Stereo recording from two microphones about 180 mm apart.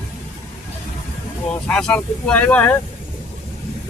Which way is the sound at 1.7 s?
5° left (ahead or behind).